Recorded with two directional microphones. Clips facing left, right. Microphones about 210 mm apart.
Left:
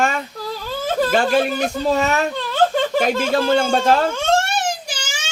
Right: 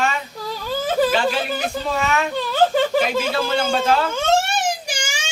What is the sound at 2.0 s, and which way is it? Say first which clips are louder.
Speech: left 3 dB; 40° left (ahead or behind).